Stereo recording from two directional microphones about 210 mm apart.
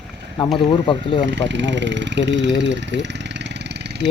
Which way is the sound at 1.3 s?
60° right (ahead or behind).